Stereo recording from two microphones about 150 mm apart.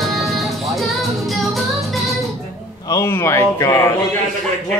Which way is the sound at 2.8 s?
20° left (ahead or behind).